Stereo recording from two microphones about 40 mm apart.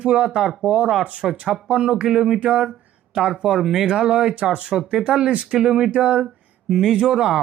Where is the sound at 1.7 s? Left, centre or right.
Right.